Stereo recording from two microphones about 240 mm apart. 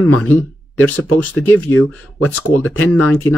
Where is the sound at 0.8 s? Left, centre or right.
Centre.